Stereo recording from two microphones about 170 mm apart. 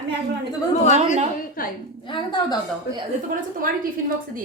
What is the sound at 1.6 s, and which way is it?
Speech, 55° left (ahead or behind).